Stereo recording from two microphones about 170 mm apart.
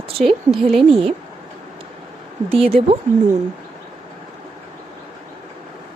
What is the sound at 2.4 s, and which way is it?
Speech, 35° right (ahead or behind).